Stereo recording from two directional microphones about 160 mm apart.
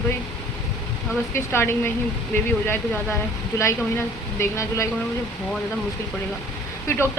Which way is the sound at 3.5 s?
15° left (ahead or behind).